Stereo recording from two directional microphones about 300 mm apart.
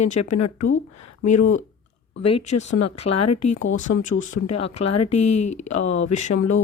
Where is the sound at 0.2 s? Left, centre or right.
Left.